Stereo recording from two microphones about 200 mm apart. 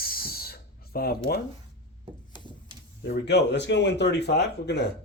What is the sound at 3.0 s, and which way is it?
Speech, 55° left (ahead or behind).